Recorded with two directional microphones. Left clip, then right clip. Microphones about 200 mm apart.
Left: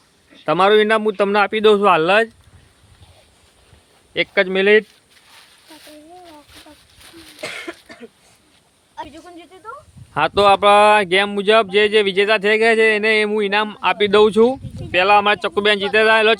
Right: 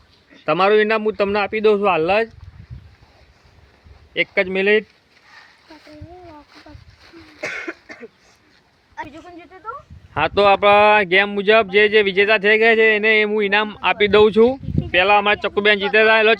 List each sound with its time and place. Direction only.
0.4 s speech: 20° left (ahead or behind); by 2.3 s 35° left (ahead or behind)
4.1 s speech: 20° left (ahead or behind)
7.4 s cough: 10° left (ahead or behind)
9.0 s snake: 15° left (ahead or behind)
10.2 s speech: 10° left (ahead or behind)